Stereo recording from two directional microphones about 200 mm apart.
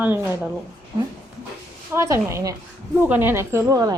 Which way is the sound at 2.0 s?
15° right (ahead or behind).